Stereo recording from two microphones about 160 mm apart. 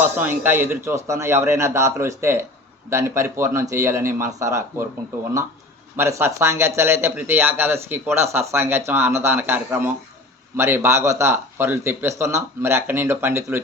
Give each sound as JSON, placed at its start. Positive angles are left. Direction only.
{"t": 0.0, "sound": "speech", "side_deg": -10}
{"t": 6.0, "sound": "speech", "side_deg": -15}